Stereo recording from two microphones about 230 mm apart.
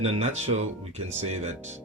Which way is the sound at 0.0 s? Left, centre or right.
Right.